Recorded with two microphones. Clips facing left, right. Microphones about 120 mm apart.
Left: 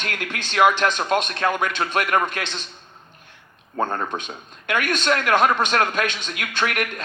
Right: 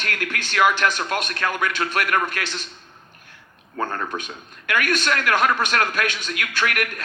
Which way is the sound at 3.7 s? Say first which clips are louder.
Left 2 dB; 20° left (ahead or behind).